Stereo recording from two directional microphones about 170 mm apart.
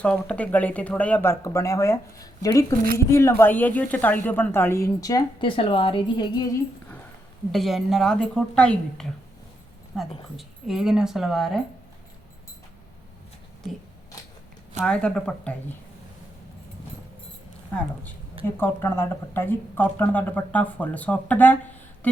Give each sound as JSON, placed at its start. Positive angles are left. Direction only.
{"t": 0.0, "sound": "a woman's voice", "side_deg": 5}
{"t": 7.5, "sound": "a woman's voice", "side_deg": 0}
{"t": 14.8, "sound": "a woman's voice", "side_deg": 5}
{"t": 18.4, "sound": "a woman's voice", "side_deg": 15}
{"t": 22.0, "sound": "a sound", "side_deg": 10}